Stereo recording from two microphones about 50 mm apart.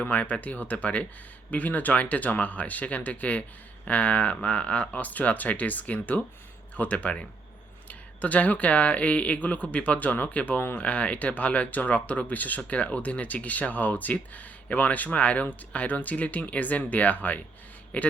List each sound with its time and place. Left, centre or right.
0.0 s speech: left